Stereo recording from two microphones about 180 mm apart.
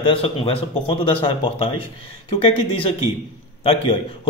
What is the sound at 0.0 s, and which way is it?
A man's voice, 30° left (ahead or behind).